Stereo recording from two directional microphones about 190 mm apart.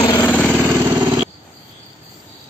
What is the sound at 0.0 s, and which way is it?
Vehicle, 20° left (ahead or behind).